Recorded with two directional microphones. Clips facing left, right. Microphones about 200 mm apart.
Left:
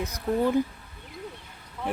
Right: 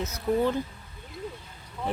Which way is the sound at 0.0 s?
15° left (ahead or behind).